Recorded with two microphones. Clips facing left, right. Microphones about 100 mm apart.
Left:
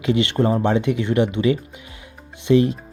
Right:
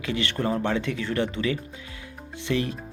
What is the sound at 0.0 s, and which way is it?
Speech, 25° left (ahead or behind).